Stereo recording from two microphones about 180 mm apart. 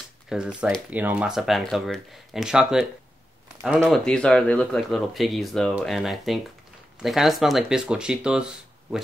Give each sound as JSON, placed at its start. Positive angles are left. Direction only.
{"t": 0.3, "sound": "speech", "side_deg": -5}
{"t": 3.9, "sound": "speech", "side_deg": 5}